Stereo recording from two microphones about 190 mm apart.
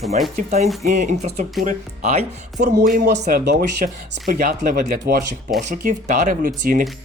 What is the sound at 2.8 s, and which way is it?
Speech, 50° right (ahead or behind).